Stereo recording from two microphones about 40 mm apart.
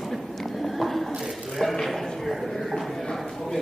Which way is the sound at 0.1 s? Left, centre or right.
Centre.